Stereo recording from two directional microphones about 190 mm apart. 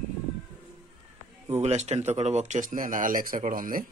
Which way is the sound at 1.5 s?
35° right (ahead or behind).